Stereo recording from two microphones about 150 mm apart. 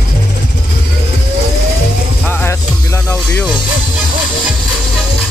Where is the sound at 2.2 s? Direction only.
15° left (ahead or behind).